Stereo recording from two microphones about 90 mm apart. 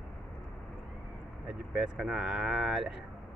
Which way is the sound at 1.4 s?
5° right (ahead or behind).